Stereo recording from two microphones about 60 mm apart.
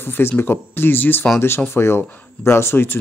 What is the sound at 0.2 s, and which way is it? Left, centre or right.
Speech, left.